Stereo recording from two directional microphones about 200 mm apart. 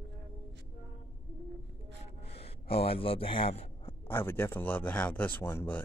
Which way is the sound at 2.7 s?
30° left (ahead or behind).